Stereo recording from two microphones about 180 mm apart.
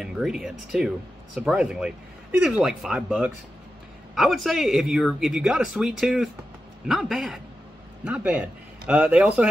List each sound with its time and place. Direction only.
0.0 s a man's voice: 5° right (ahead or behind)